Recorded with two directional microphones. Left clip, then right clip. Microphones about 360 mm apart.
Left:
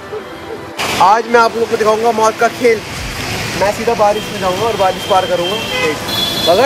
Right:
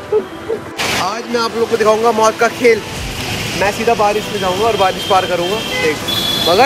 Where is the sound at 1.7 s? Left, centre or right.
Centre.